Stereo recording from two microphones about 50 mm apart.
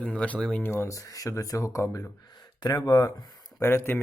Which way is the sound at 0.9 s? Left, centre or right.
Left.